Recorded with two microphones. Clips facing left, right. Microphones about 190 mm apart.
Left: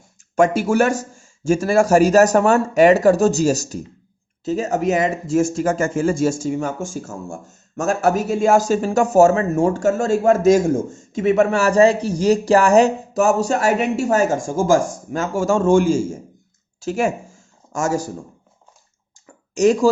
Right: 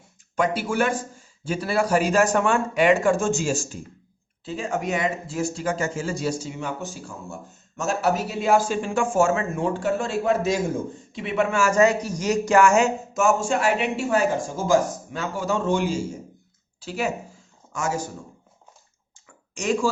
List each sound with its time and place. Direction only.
0.2 s speech: 45° left (ahead or behind)
16.8 s a sound: 45° left (ahead or behind)
19.5 s speech: 40° left (ahead or behind)